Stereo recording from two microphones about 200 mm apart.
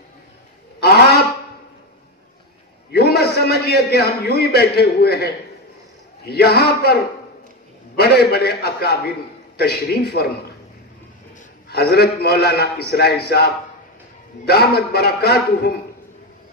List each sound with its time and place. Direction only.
0.7 s a sound: 50° left (ahead or behind)
2.9 s a man's voice: 50° left (ahead or behind)
11.7 s a man's voice: 50° left (ahead or behind)